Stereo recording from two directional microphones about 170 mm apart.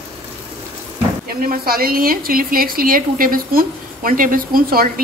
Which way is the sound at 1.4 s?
60° right (ahead or behind).